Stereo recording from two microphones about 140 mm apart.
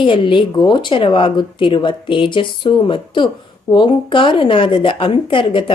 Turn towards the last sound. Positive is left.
turn(degrees=40)  # may be behind; listen again after turning